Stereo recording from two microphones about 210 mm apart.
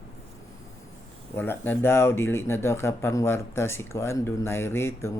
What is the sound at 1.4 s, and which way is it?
Speech, 10° left (ahead or behind).